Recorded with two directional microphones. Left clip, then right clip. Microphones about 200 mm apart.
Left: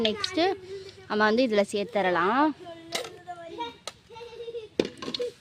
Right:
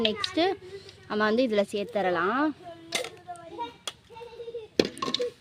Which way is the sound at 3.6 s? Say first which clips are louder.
Even; 45° left (ahead or behind).